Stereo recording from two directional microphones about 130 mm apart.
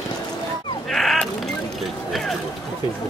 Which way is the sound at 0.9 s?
Centre (ahead or behind).